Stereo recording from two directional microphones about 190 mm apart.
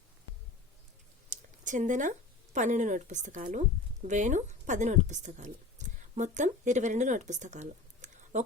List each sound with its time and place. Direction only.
1.3 s speech: 40° right (ahead or behind)